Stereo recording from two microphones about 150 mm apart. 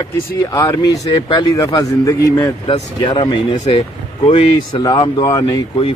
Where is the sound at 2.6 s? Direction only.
35° left (ahead or behind).